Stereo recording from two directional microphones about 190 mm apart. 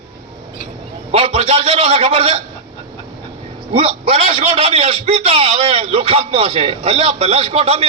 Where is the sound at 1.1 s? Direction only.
30° right (ahead or behind).